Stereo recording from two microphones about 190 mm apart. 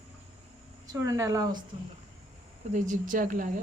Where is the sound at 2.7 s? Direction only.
40° right (ahead or behind).